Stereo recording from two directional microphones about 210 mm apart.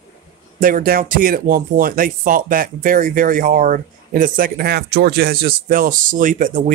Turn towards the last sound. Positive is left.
turn(degrees=-40)  # may be behind; listen again after turning